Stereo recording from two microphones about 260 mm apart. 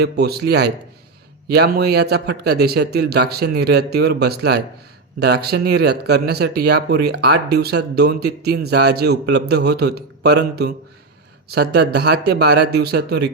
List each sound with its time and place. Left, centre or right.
0.0 s speech: right